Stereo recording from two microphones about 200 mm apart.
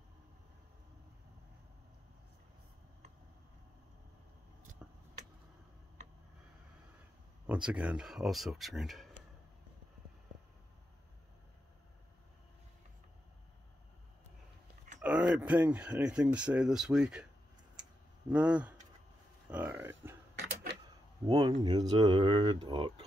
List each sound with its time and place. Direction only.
4.8 s vehicle: 5° right (ahead or behind)
7.4 s speech: 5° right (ahead or behind)
15.0 s speech: 5° right (ahead or behind)
18.3 s speech: 5° right (ahead or behind)
21.3 s speech: 20° right (ahead or behind)